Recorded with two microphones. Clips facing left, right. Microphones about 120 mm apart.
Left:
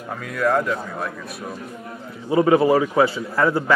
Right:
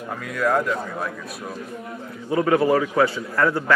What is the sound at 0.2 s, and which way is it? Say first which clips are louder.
Speech: left 1 dB; centre (ahead or behind).